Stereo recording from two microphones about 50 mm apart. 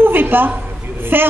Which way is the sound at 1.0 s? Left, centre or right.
Right.